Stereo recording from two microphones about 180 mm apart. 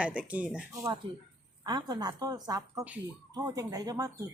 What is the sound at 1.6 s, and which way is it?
A woman's voice, 25° right (ahead or behind).